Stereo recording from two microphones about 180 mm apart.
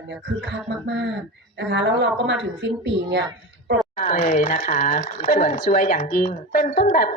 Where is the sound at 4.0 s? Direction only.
45° left (ahead or behind).